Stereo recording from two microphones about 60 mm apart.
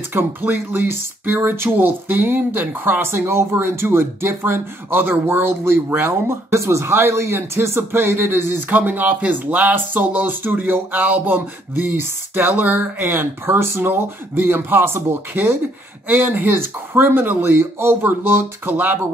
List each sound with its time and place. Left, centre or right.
0.1 s speech: right